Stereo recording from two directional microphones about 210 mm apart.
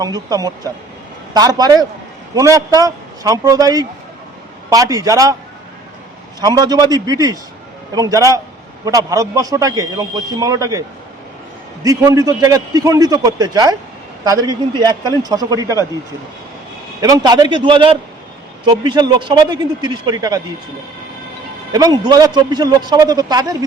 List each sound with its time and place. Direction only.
0.0 s a man's voice: 15° right (ahead or behind)
6.4 s a man's voice: 20° right (ahead or behind)
17.0 s a man's voice: 20° right (ahead or behind)
21.7 s a man's voice: 20° right (ahead or behind)